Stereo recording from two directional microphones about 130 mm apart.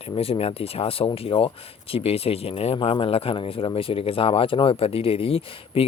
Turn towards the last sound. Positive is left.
turn(degrees=45)  # may be behind; listen again after turning